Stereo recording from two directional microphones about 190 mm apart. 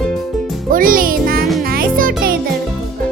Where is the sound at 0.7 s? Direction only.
50° right (ahead or behind).